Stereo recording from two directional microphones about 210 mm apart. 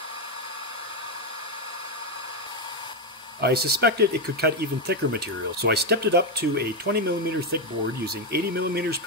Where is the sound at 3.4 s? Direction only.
50° right (ahead or behind).